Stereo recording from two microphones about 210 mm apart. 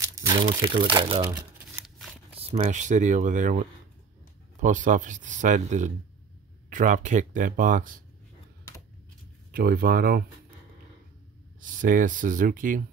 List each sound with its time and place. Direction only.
0.0 s speech: 20° right (ahead or behind)
2.3 s speech: 30° right (ahead or behind)
9.5 s speech: 45° right (ahead or behind)
11.6 s speech: 40° right (ahead or behind)